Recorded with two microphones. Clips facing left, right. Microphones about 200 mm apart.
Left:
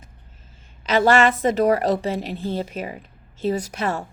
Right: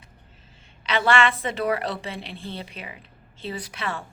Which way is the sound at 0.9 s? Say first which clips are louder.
Left 5 dB; 40° left (ahead or behind).